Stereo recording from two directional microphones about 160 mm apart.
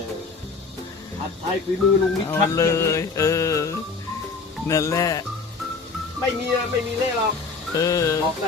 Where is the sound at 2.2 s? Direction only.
20° left (ahead or behind).